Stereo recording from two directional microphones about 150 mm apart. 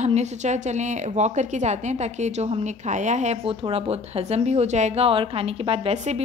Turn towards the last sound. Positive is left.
turn(degrees=-45)  # may be behind; listen again after turning